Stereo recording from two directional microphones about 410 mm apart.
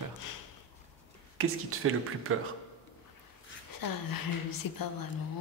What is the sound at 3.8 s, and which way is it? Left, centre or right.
Speech, left.